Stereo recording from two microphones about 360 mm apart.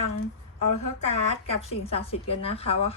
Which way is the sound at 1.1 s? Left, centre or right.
Centre.